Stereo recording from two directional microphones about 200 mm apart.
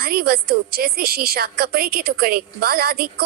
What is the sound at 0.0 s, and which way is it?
A woman's voice, 50° right (ahead or behind).